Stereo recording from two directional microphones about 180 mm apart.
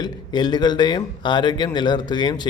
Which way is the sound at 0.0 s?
25° left (ahead or behind).